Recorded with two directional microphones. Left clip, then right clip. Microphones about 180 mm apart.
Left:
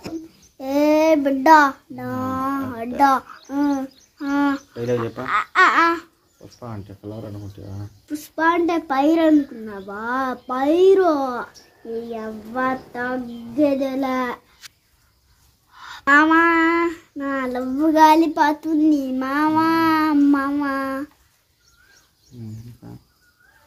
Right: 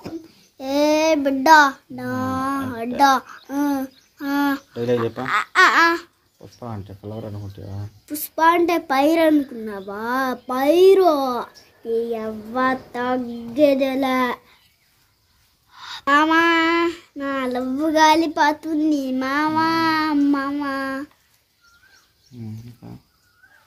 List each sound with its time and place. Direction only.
0.6 s child singing: 5° right (ahead or behind)
5.1 s speech: 15° right (ahead or behind)
6.6 s speech: 35° right (ahead or behind)
8.1 s speech: 15° right (ahead or behind)
12.1 s child singing: 20° right (ahead or behind)
13.7 s speech: 20° right (ahead or behind)
15.7 s a sound: 15° right (ahead or behind)
16.0 s a sound: centre (ahead or behind)
22.8 s a sound: 35° right (ahead or behind)